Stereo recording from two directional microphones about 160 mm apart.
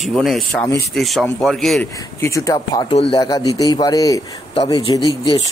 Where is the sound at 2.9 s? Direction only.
35° left (ahead or behind).